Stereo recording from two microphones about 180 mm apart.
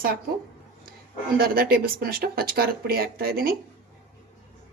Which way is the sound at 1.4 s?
55° right (ahead or behind).